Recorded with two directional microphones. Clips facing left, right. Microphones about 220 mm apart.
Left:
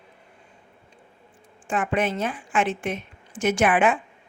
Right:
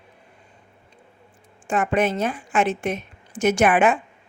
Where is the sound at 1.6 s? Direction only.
40° right (ahead or behind).